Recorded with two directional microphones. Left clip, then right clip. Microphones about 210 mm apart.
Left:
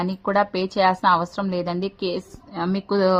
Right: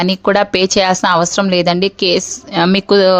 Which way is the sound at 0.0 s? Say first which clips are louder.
Right 9 dB; 35° right (ahead or behind).